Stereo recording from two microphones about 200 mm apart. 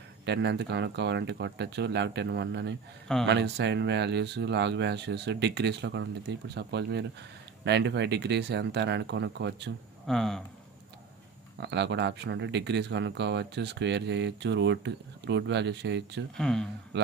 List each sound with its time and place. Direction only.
0.2 s speech: 60° right (ahead or behind)
10.0 s speech: centre (ahead or behind)
11.6 s speech: 60° right (ahead or behind)
16.3 s speech: 5° left (ahead or behind)
16.9 s speech: 65° right (ahead or behind)